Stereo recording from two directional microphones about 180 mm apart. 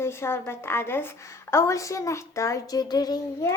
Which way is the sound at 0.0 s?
15° left (ahead or behind).